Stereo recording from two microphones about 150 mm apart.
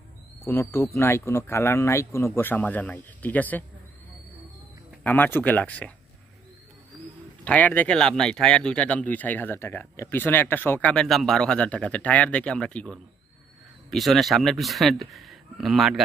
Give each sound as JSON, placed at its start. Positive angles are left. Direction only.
{"t": 0.5, "sound": "speech", "side_deg": 15}
{"t": 5.0, "sound": "speech", "side_deg": 10}
{"t": 7.4, "sound": "speech", "side_deg": 10}